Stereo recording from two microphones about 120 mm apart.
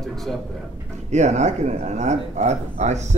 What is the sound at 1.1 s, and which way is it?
Speech, 70° right (ahead or behind).